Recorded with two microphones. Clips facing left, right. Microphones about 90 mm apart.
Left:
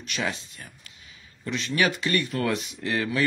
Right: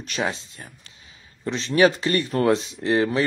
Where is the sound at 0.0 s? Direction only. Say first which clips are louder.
Right 4 dB; 35° right (ahead or behind).